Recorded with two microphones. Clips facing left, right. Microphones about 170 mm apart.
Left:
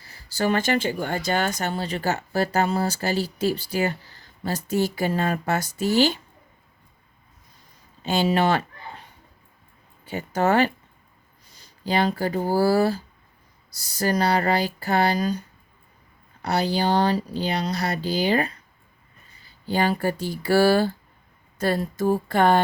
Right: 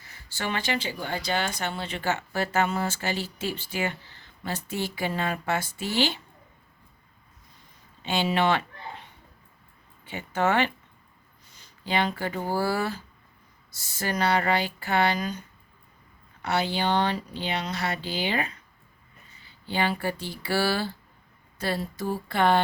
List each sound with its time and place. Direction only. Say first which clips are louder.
0.0 s speech: left 9 dB; 35° left (ahead or behind)
8.0 s speech: left 3 dB; 40° left (ahead or behind)
10.1 s speech: left 4 dB; 40° left (ahead or behind)
21.6 s a sound: left 6 dB; 50° left (ahead or behind)